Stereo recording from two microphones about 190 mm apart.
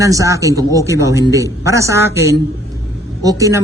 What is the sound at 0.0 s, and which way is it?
A man's voice, 15° right (ahead or behind).